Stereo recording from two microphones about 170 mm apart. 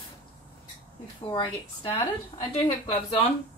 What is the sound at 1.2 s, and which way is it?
Speech, 30° left (ahead or behind).